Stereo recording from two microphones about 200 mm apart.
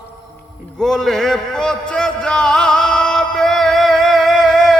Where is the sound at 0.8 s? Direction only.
Centre (ahead or behind).